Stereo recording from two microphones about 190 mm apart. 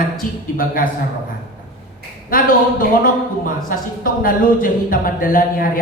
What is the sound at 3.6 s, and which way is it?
Speech, 45° left (ahead or behind).